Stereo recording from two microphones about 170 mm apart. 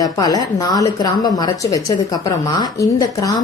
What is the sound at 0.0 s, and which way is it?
A woman's voice, 20° left (ahead or behind).